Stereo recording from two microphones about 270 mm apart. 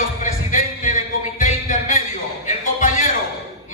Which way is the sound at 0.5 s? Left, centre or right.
Left.